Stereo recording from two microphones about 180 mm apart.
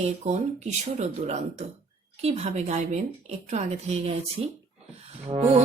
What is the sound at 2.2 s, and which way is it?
Music, 40° right (ahead or behind).